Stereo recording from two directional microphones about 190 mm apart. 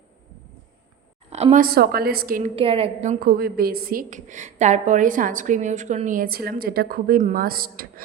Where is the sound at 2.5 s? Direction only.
30° right (ahead or behind).